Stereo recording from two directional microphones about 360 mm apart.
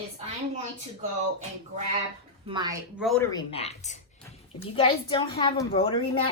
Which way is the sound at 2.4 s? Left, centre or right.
Centre.